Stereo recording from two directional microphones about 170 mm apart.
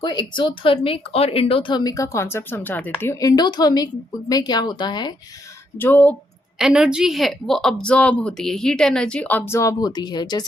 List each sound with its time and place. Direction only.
0.0 s speech: 25° left (ahead or behind)
5.7 s speech: 10° left (ahead or behind)
6.6 s a woman's voice: 5° right (ahead or behind); by 10.4 s 25° left (ahead or behind)